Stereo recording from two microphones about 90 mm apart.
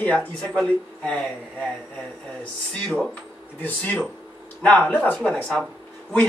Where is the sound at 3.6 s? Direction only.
20° left (ahead or behind).